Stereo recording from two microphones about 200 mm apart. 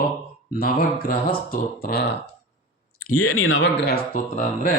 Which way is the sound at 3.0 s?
90° left.